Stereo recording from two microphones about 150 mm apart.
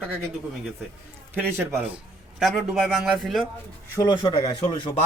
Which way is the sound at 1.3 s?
15° right (ahead or behind).